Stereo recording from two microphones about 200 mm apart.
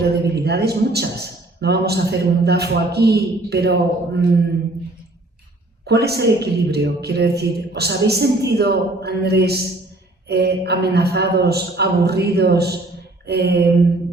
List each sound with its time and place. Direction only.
0.0 s a man's voice: 55° right (ahead or behind)
5.8 s a man's voice: 55° right (ahead or behind)